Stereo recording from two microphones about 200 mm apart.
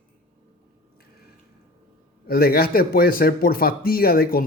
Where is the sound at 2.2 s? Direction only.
50° left (ahead or behind).